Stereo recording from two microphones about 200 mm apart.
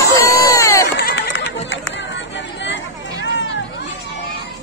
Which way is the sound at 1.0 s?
60° left (ahead or behind).